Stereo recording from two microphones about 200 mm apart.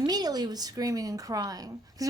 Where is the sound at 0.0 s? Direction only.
20° right (ahead or behind).